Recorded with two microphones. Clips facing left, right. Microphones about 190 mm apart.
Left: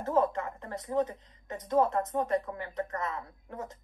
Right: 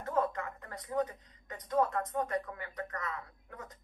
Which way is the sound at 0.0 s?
25° left (ahead or behind).